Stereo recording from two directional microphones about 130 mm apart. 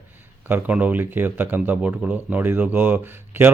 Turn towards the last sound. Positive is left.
turn(degrees=-15)  # may be behind; listen again after turning